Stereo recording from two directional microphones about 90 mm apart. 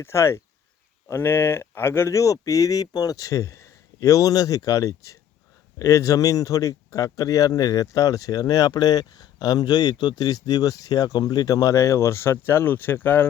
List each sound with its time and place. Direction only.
0.0 s speech: 30° left (ahead or behind)